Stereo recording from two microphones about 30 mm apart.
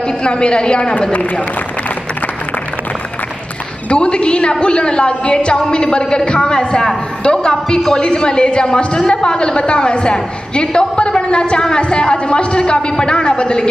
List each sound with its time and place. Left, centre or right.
0.0 s a woman's voice: left
3.9 s a man's voice: left